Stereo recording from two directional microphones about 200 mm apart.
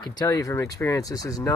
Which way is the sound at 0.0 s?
20° left (ahead or behind).